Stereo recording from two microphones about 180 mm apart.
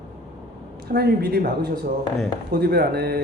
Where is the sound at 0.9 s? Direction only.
60° right (ahead or behind).